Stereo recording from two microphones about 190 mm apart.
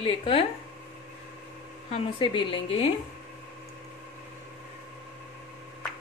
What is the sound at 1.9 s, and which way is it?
Speech, 25° left (ahead or behind).